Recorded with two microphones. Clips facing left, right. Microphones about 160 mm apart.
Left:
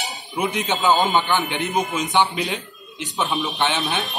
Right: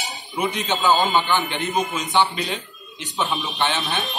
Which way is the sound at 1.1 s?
15° left (ahead or behind).